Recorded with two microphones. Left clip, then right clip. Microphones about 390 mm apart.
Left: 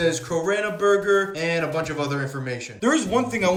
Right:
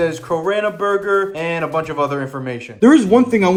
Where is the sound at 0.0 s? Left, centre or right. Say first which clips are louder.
Right 4 dB; centre.